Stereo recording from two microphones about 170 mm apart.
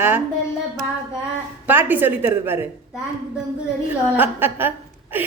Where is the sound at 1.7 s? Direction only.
10° right (ahead or behind).